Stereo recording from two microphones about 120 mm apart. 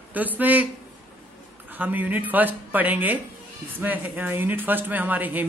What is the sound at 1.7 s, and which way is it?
Speech, 15° right (ahead or behind).